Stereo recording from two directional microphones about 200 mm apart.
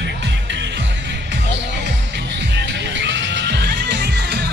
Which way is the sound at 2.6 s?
60° right (ahead or behind).